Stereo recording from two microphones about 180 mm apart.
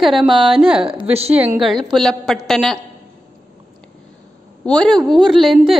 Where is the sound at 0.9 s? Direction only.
30° right (ahead or behind).